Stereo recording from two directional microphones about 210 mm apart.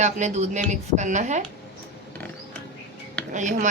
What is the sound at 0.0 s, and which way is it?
Speech, 35° right (ahead or behind).